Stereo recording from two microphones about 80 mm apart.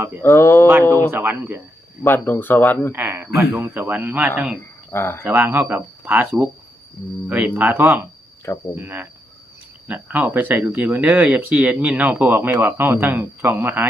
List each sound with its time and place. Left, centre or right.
0.2 s speech: left
1.1 s speech: right
2.0 s speech: left
2.9 s speech: right
4.9 s speech: left
5.2 s speech: right